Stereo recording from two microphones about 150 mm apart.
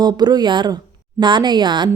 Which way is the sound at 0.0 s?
30° right (ahead or behind).